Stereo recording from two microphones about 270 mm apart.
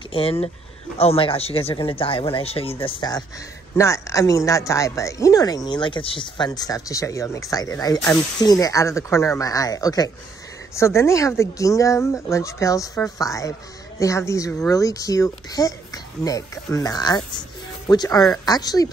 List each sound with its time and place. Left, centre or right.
0.1 s speech: left